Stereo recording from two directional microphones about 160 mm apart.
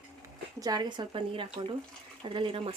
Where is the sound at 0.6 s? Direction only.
25° right (ahead or behind).